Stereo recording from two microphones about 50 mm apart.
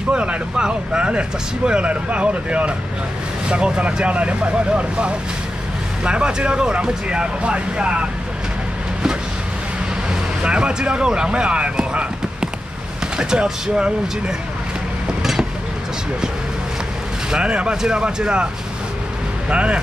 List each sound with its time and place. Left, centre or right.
0.1 s speech: right
10.4 s speech: centre
17.3 s speech: right
19.5 s speech: right